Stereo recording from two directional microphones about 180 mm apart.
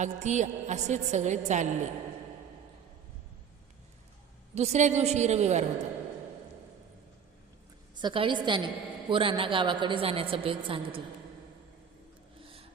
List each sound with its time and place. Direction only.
0.0 s a woman's voice: 40° right (ahead or behind)
4.5 s a woman's voice: 40° right (ahead or behind)
7.9 s a woman's voice: 25° right (ahead or behind)
12.4 s a sound: 30° right (ahead or behind)